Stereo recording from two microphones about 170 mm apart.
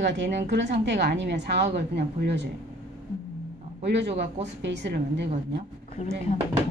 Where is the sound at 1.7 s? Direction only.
80° right.